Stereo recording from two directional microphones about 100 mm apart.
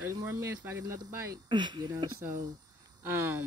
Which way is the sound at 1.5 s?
50° right (ahead or behind).